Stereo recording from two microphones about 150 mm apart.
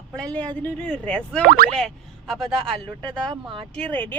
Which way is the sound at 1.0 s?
5° left (ahead or behind).